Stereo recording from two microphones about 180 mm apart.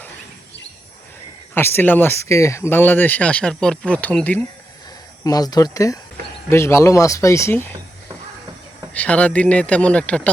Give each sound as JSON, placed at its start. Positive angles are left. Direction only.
{"t": 1.5, "sound": "speech", "side_deg": 10}
{"t": 5.2, "sound": "speech", "side_deg": 20}
{"t": 8.9, "sound": "speech", "side_deg": 5}